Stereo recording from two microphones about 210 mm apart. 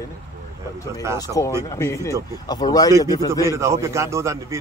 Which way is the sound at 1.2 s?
15° left (ahead or behind).